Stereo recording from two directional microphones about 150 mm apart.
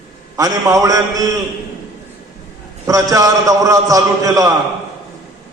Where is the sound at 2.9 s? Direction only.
25° right (ahead or behind).